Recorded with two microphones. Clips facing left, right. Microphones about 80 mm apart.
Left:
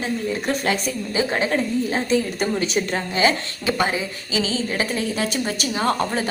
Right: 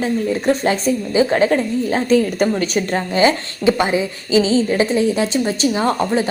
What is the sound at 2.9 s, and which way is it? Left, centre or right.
A woman's voice, right.